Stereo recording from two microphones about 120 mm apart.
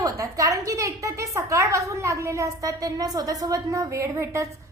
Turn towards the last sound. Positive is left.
turn(degrees=-25)  # may be behind; listen again after turning